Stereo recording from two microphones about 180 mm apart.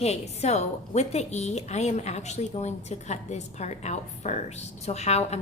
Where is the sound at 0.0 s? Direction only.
35° left (ahead or behind).